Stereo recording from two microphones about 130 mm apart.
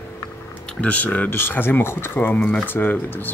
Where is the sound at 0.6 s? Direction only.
10° left (ahead or behind).